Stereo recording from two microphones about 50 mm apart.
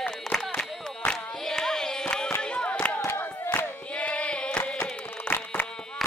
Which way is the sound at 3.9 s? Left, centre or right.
Left.